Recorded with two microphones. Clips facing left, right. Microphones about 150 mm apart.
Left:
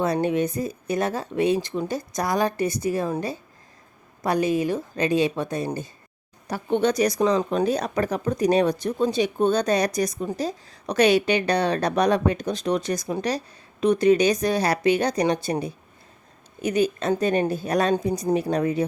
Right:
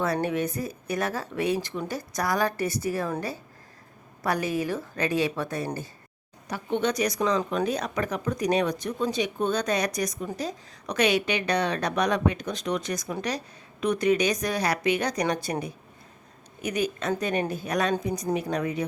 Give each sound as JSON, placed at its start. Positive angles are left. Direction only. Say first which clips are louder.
{"t": 0.0, "sound": "speech", "louder": "left 4 dB", "side_deg": 20}
{"t": 6.5, "sound": "speech", "louder": "left 5 dB", "side_deg": 35}